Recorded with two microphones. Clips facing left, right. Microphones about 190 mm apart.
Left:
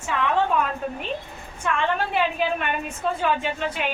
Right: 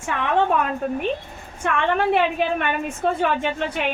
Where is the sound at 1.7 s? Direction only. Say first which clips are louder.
Right 4 dB; 60° right (ahead or behind).